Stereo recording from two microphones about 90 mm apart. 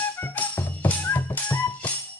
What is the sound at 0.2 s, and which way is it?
Music, 20° left (ahead or behind).